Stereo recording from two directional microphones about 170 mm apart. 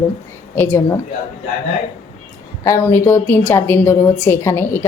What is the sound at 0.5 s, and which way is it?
Speech, 15° left (ahead or behind).